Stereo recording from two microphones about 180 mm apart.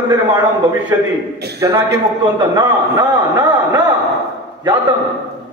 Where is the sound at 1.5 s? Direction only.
20° right (ahead or behind).